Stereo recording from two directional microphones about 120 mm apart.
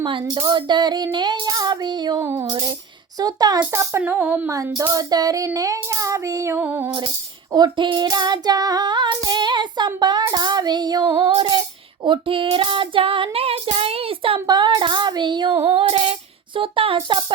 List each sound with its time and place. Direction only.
0.0 s child singing: 45° right (ahead or behind)
2.2 s child singing: 20° right (ahead or behind)
2.5 s child singing: 35° right (ahead or behind)
3.6 s music: 20° right (ahead or behind)
4.4 s child singing: 25° right (ahead or behind)
7.5 s child singing: 40° right (ahead or behind)
14.4 s child singing: 35° right (ahead or behind)
15.6 s child singing: 50° right (ahead or behind)